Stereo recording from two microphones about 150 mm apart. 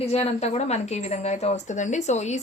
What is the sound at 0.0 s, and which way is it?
A woman's voice, 45° left (ahead or behind).